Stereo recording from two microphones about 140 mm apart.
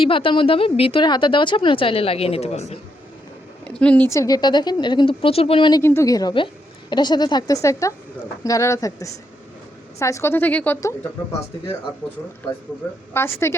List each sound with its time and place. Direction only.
0.0 s speech: 40° left (ahead or behind)
3.6 s speech: 10° left (ahead or behind)
4.1 s speech: 25° left (ahead or behind)
5.8 s a woman's voice: 20° left (ahead or behind)
13.1 s speech: 20° left (ahead or behind)